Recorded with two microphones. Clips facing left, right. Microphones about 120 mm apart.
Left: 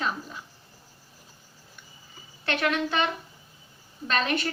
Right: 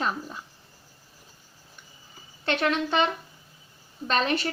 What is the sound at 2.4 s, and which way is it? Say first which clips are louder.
A woman's voice: right 1 dB; 30° right (ahead or behind).